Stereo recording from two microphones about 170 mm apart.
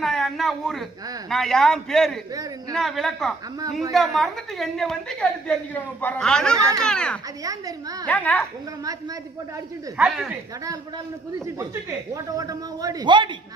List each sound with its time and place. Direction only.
0.0 s a woman's voice: centre (ahead or behind)
2.3 s speech: 20° right (ahead or behind)
2.7 s a woman's voice: centre (ahead or behind)
7.4 s speech: 20° right (ahead or behind)
8.0 s a woman's voice: 10° left (ahead or behind)
8.8 s speech: 20° right (ahead or behind)
10.0 s a woman's voice: 5° right (ahead or behind)
10.6 s speech: 20° right (ahead or behind)